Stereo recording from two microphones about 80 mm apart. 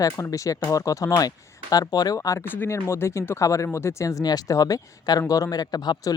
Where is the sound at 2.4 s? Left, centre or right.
Left.